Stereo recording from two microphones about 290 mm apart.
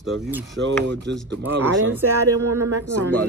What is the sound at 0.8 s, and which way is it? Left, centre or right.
Speech, right.